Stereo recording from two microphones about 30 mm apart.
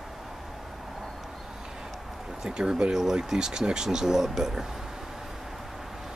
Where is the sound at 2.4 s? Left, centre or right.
Right.